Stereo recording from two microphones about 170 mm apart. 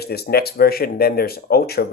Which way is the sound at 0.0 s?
70° left (ahead or behind).